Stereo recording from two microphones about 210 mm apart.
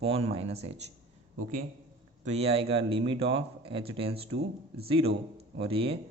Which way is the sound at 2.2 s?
30° right (ahead or behind).